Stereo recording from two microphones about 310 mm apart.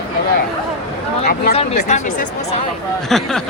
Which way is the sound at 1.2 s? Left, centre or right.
Left.